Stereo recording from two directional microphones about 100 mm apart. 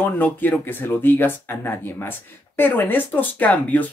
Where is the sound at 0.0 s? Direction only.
15° left (ahead or behind).